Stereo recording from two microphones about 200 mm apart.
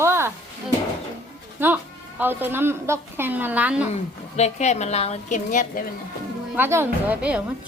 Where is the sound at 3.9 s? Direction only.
35° left (ahead or behind).